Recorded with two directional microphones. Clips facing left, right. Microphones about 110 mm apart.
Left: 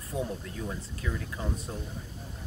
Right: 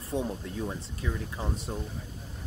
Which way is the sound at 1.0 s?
25° right (ahead or behind).